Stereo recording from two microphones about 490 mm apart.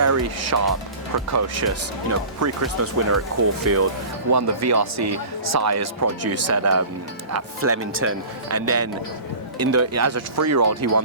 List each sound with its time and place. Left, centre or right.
0.0 s speech: right